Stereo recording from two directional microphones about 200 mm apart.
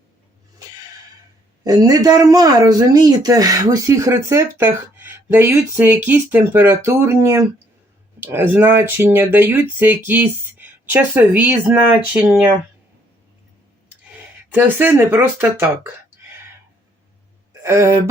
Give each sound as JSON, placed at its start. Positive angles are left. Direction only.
{"t": 1.6, "sound": "speech", "side_deg": -20}
{"t": 14.5, "sound": "speech", "side_deg": -10}
{"t": 17.5, "sound": "speech", "side_deg": -15}